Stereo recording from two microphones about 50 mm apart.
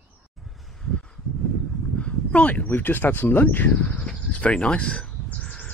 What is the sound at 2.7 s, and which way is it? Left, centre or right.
Speech, left.